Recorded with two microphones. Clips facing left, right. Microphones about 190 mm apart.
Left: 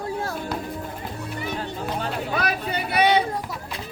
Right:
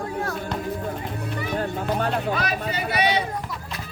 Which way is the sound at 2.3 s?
60° left (ahead or behind).